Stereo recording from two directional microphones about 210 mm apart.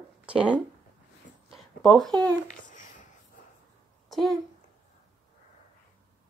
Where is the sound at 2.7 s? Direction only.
40° left (ahead or behind).